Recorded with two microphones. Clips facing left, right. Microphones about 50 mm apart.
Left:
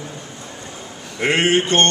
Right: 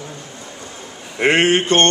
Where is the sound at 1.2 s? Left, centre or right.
Right.